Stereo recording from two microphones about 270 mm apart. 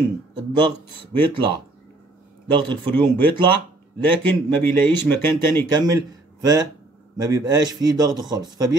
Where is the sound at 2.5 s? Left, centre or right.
Centre.